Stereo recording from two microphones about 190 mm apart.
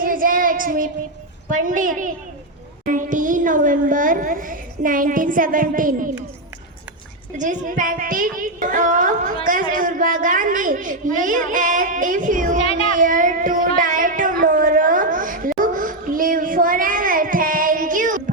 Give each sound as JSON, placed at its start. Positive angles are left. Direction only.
{"t": 0.0, "sound": "child singing", "side_deg": -45}
{"t": 1.5, "sound": "a woman's voice", "side_deg": -45}
{"t": 7.3, "sound": "a woman's voice", "side_deg": -40}
{"t": 12.5, "sound": "a child's voice", "side_deg": 30}
{"t": 12.9, "sound": "a sound", "side_deg": -45}